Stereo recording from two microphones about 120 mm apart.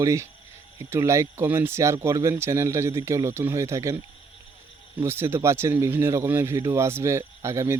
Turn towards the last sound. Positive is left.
turn(degrees=-25)  # may be behind; listen again after turning